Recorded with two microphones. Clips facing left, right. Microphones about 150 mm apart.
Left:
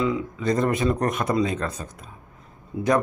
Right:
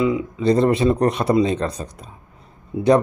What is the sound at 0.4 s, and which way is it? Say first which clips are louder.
Speech: right 7 dB; 30° right (ahead or behind).